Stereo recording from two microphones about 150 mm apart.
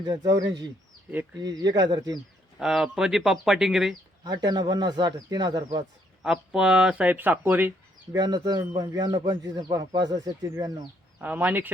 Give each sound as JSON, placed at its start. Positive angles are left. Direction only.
{"t": 0.3, "sound": "speech", "side_deg": -25}
{"t": 2.6, "sound": "speech", "side_deg": -5}
{"t": 4.2, "sound": "speech", "side_deg": -25}
{"t": 6.2, "sound": "speech", "side_deg": -5}
{"t": 8.1, "sound": "speech", "side_deg": -25}
{"t": 11.2, "sound": "speech", "side_deg": -10}